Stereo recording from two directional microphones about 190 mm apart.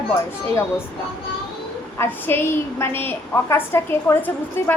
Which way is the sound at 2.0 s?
10° left (ahead or behind).